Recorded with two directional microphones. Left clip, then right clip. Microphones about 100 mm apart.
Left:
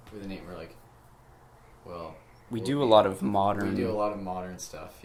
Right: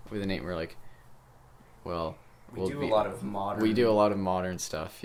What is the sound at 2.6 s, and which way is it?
Speech, 30° left (ahead or behind).